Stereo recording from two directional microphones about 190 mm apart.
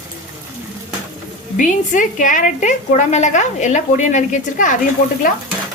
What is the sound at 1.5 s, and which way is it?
A woman's voice, 40° left (ahead or behind).